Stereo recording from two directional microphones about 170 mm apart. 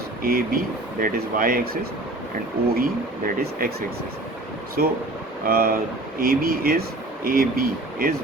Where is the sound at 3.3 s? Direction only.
65° right (ahead or behind).